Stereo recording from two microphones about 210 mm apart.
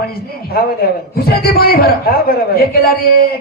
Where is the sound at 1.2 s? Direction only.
45° left (ahead or behind).